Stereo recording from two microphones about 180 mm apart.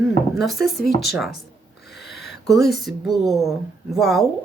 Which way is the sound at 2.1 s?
65° left (ahead or behind).